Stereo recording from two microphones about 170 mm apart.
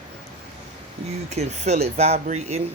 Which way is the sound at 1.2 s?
40° right (ahead or behind).